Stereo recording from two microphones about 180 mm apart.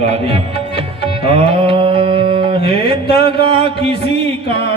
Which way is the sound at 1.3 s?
30° right (ahead or behind).